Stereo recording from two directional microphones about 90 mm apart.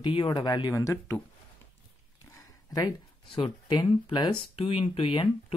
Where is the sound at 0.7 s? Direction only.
30° left (ahead or behind).